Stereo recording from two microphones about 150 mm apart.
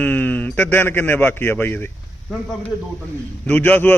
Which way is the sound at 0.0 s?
10° left (ahead or behind).